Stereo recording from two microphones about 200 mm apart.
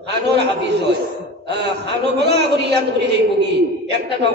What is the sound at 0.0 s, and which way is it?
A man's voice, 60° right (ahead or behind).